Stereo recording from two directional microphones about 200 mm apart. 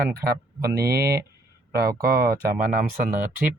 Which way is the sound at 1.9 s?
50° right (ahead or behind).